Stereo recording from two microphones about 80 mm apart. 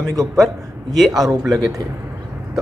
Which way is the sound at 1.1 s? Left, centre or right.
Right.